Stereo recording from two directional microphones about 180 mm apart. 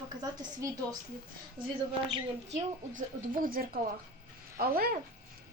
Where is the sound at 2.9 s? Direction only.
50° right (ahead or behind).